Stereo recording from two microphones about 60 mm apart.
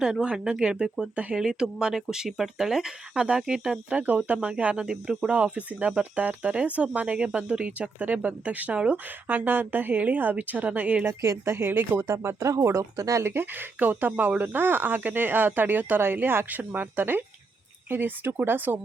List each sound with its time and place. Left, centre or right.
0.0 s speech: centre
9.2 s speech: right
11.3 s speech: right
12.0 s speech: right
13.0 s speech: right
13.2 s speech: right